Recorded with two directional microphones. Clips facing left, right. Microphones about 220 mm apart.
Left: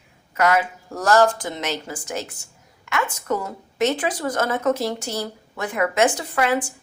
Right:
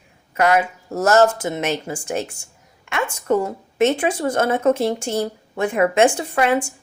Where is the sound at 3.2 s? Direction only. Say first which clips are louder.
Right 6 dB; 30° right (ahead or behind).